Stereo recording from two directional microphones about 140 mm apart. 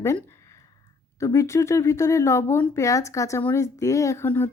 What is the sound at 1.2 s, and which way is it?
A woman's voice, 20° left (ahead or behind).